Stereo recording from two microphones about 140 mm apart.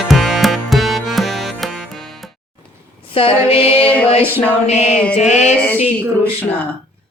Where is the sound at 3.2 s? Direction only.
45° left (ahead or behind).